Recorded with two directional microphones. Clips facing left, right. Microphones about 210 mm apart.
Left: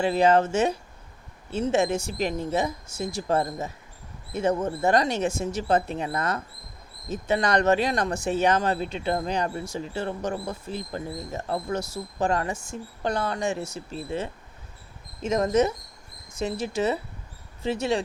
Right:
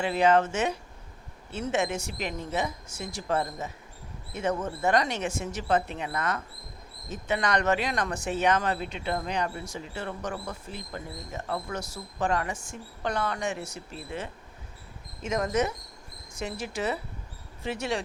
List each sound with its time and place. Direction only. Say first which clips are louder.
0.0 s speech: left 3 dB; 35° left (ahead or behind)
4.4 s speech: left 5 dB; 30° left (ahead or behind)
15.3 s speech: left 5 dB; 25° left (ahead or behind)